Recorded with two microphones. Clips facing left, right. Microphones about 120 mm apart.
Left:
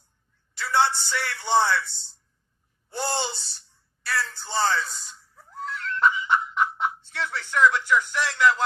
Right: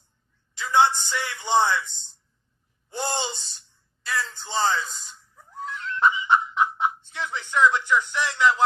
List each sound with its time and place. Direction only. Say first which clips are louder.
0.5 s a man's voice: right 3 dB; 15° right (ahead or behind)
4.0 s music: even; 15° right (ahead or behind)